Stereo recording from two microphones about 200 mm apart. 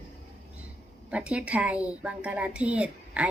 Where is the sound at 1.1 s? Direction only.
5° right (ahead or behind).